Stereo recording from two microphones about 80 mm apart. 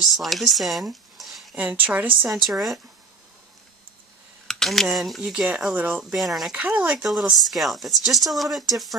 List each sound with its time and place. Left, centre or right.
0.0 s speech: centre
1.5 s speech: centre
2.3 s speech: centre
4.5 s speech: centre
5.2 s speech: centre
6.1 s speech: centre
6.5 s speech: centre
7.0 s speech: centre